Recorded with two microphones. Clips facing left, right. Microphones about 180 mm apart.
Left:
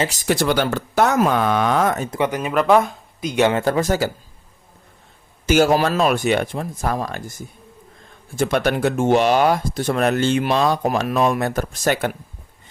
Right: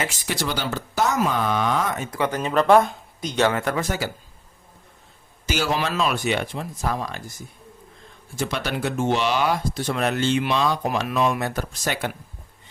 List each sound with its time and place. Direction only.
0.0 s speech: 40° left (ahead or behind)
2.0 s speech: 20° left (ahead or behind)
3.3 s speech: 20° left (ahead or behind)
3.6 s speech: 35° left (ahead or behind)
5.5 s speech: 50° left (ahead or behind)
8.4 s speech: 50° left (ahead or behind)